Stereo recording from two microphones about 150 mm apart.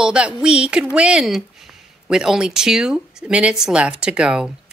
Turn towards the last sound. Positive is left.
turn(degrees=-5)  # may be behind; listen again after turning